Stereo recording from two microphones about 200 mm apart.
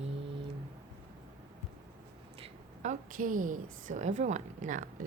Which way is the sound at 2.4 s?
35° right (ahead or behind).